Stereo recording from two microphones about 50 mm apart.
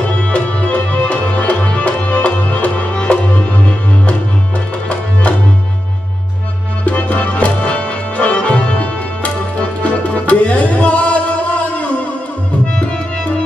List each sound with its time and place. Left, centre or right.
0.3 s music: left
6.9 s music: left